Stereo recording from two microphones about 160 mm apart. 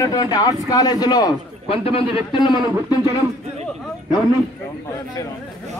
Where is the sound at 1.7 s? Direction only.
35° left (ahead or behind).